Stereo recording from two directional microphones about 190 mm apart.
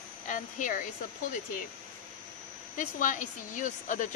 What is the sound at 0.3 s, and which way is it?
Speech, 45° left (ahead or behind).